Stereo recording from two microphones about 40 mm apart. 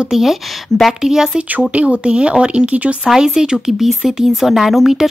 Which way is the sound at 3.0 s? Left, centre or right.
Centre.